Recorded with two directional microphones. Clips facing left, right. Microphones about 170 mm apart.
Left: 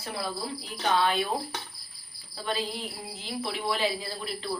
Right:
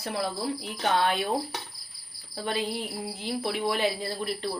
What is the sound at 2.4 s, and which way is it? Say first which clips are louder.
A woman's voice: right 2 dB; 60° right (ahead or behind).